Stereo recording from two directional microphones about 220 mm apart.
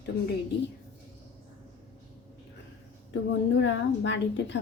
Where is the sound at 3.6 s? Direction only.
55° left (ahead or behind).